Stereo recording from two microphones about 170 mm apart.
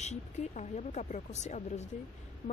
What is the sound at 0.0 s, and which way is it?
Speech, 45° left (ahead or behind).